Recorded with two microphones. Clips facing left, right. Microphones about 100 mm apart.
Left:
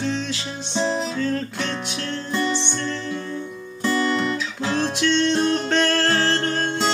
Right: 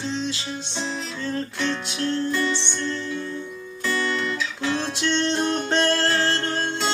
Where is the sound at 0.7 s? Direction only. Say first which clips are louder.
Left 10 dB; 45° left (ahead or behind).